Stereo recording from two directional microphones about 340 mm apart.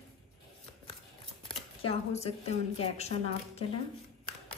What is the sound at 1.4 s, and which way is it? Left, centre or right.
A woman's voice, centre.